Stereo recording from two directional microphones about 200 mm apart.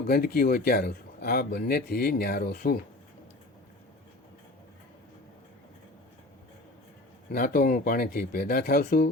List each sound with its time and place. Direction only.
0.1 s speech: 50° left (ahead or behind)
7.3 s speech: 45° left (ahead or behind)